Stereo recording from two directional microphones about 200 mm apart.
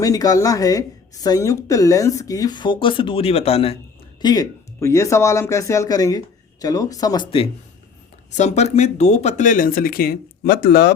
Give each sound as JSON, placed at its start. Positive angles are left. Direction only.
{"t": 0.0, "sound": "a woman's voice", "side_deg": 15}
{"t": 4.2, "sound": "a woman's voice", "side_deg": 20}